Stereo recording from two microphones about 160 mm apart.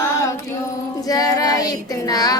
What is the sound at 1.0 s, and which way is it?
Child singing, 25° left (ahead or behind).